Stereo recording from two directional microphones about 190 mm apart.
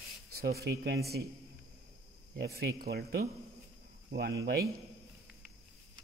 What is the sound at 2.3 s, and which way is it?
Speech, 55° right (ahead or behind).